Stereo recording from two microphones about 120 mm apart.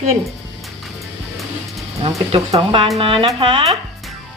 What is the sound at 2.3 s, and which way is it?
Speech, 50° right (ahead or behind).